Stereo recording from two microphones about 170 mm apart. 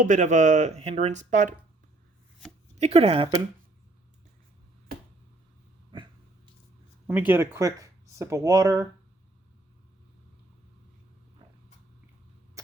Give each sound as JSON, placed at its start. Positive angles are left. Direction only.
{"t": 0.0, "sound": "speech", "side_deg": -45}
{"t": 2.7, "sound": "speech", "side_deg": -40}
{"t": 5.9, "sound": "a sound", "side_deg": -30}
{"t": 7.1, "sound": "speech", "side_deg": -10}
{"t": 12.6, "sound": "mains hum", "side_deg": -20}